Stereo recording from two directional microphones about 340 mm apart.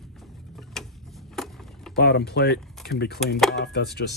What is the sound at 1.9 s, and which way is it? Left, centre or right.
Speech, left.